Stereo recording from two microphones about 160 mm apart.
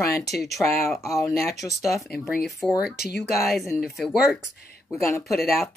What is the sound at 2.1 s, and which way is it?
Speech, centre (ahead or behind).